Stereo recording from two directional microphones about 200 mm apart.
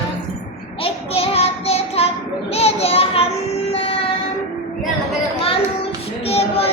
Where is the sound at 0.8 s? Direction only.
30° left (ahead or behind).